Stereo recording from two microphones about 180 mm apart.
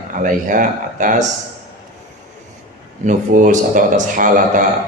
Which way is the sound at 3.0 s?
45° right (ahead or behind).